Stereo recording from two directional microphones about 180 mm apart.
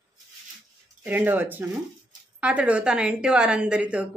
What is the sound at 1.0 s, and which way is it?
Speech, 10° right (ahead or behind).